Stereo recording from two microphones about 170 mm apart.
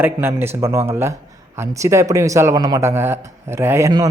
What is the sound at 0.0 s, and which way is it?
Speech, 10° right (ahead or behind).